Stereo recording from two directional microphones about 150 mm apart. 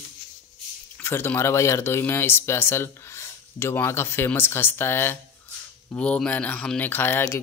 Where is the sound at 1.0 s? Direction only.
15° left (ahead or behind).